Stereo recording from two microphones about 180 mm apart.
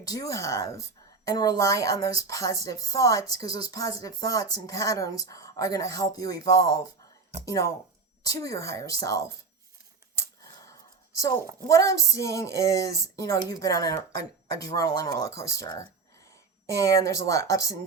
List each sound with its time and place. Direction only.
0.0 s speech: 20° left (ahead or behind)
11.2 s a woman's voice: 20° left (ahead or behind)